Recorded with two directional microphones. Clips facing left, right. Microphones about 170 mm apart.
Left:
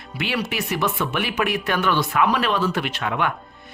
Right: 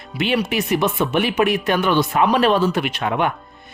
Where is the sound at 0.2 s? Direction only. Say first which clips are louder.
Right 6 dB; 20° right (ahead or behind).